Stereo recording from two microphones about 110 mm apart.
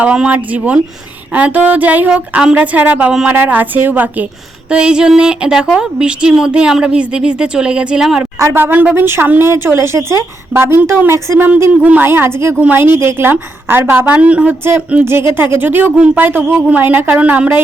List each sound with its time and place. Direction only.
0.0 s a woman's voice: 10° right (ahead or behind)
8.4 s a woman's voice: 20° right (ahead or behind)